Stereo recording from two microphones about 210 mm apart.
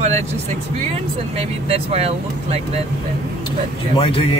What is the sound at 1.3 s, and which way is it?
Speech, 30° right (ahead or behind).